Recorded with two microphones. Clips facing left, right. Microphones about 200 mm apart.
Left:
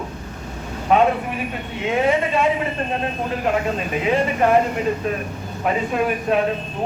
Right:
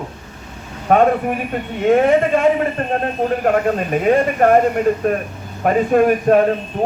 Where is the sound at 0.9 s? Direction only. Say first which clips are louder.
Right 4 dB; 50° right (ahead or behind).